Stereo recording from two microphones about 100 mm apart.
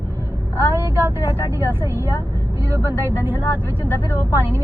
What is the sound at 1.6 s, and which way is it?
Speech, 25° right (ahead or behind).